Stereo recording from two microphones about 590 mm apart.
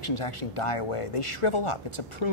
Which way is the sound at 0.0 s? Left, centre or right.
Left.